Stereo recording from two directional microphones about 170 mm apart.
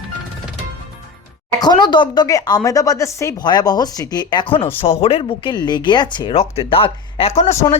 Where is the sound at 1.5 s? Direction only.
25° left (ahead or behind).